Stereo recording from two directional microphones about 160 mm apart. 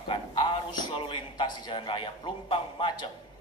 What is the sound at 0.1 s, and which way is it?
A man's voice, 30° left (ahead or behind).